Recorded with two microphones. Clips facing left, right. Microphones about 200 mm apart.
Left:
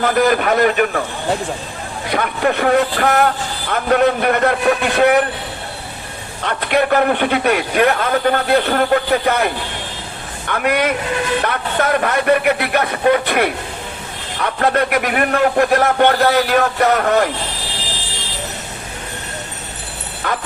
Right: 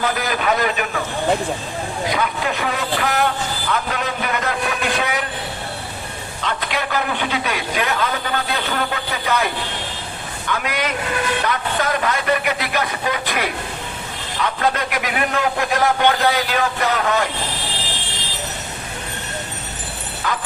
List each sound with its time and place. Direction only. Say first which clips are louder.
0.0 s speech: left 7 dB; 50° left (ahead or behind)
2.0 s a man's voice: left 6 dB; 55° left (ahead or behind)
6.4 s a man's voice: left 8 dB; 60° left (ahead or behind)
20.2 s speech: left 2 dB; 55° left (ahead or behind)